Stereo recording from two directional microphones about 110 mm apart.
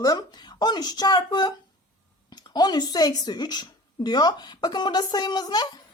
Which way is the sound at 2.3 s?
40° left (ahead or behind).